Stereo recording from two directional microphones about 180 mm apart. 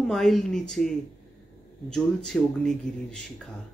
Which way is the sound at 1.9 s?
5° left (ahead or behind).